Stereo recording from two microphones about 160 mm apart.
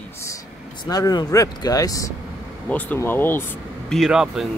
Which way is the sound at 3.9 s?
5° right (ahead or behind).